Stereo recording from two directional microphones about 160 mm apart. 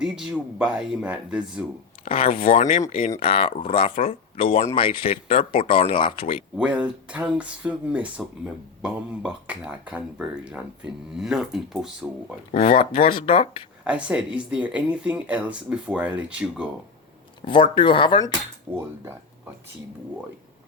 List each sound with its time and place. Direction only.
0.0 s speech: 5° right (ahead or behind)
2.0 s speech: 35° left (ahead or behind)
6.6 s speech: 5° right (ahead or behind)
12.5 s speech: 55° left (ahead or behind)
13.1 s speech: 30° left (ahead or behind)
13.8 s speech: 5° right (ahead or behind)
17.4 s speech: 30° left (ahead or behind)
18.7 s speech: 15° right (ahead or behind)